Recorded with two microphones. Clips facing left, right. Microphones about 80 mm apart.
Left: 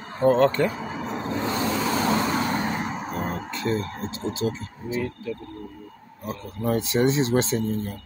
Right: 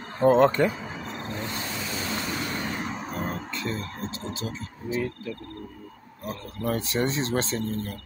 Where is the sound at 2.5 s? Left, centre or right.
Left.